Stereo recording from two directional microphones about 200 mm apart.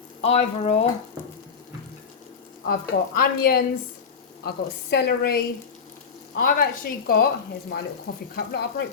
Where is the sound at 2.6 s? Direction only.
45° left (ahead or behind).